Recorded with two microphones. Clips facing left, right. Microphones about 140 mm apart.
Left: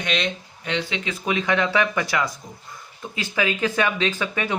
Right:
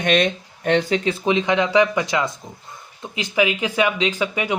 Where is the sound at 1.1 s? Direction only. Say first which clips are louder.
Right 2 dB; 25° right (ahead or behind).